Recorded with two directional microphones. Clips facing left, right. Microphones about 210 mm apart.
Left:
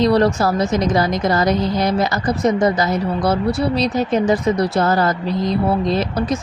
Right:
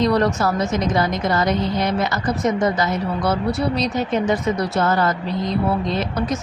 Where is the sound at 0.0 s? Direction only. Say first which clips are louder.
Left 3 dB; 35° left (ahead or behind).